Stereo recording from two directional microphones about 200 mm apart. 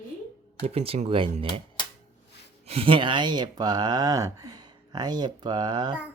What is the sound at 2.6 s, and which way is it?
Speech, 30° right (ahead or behind).